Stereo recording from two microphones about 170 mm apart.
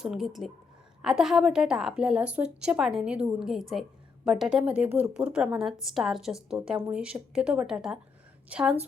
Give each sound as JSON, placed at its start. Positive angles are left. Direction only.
{"t": 0.0, "sound": "a woman's voice", "side_deg": 0}